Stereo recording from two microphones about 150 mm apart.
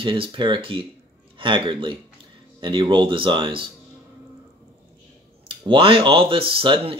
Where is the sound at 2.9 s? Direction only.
35° right (ahead or behind).